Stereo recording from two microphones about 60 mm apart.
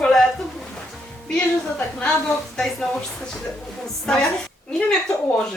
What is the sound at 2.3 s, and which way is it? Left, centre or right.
Speech, centre.